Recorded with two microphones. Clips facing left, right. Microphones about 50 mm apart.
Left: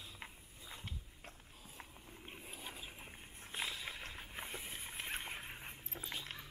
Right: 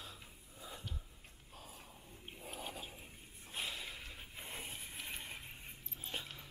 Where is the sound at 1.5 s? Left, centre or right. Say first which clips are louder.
Right 4 dB; right.